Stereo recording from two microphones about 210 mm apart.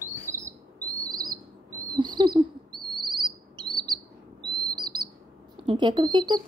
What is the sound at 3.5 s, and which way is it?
Chirp, 20° right (ahead or behind).